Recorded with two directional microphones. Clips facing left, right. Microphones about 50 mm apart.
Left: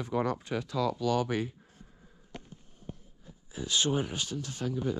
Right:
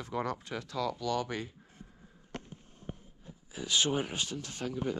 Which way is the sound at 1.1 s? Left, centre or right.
Left.